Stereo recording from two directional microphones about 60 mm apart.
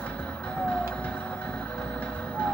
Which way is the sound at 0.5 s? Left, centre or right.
Left.